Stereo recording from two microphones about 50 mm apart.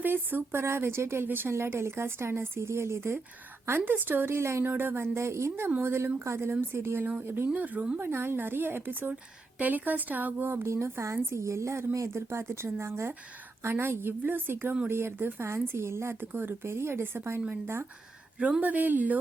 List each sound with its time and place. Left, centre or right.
0.0 s a woman's voice: right
0.6 s a woman's voice: right
3.7 s a woman's voice: right
4.3 s a woman's voice: right
4.6 s a woman's voice: right
5.1 s a woman's voice: right
7.0 s speech: right
7.5 s speech: right
10.7 s a woman's voice: right
16.3 s a woman's voice: right
16.7 s a woman's voice: right
18.6 s speech: right